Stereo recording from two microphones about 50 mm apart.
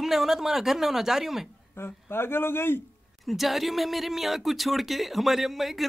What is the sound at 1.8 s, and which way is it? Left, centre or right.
A man's voice, left.